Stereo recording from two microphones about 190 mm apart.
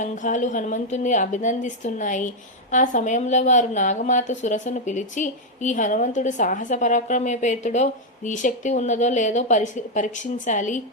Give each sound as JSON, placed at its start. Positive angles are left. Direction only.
{"t": 0.0, "sound": "a woman's voice", "side_deg": 40}